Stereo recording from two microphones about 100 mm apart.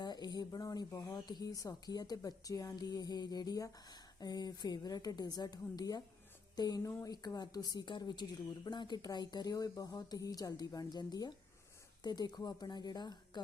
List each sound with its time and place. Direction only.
0.0 s speech: 45° left (ahead or behind)
1.1 s a woman's voice: 45° left (ahead or behind)